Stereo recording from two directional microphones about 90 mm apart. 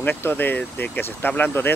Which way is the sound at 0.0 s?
25° left (ahead or behind).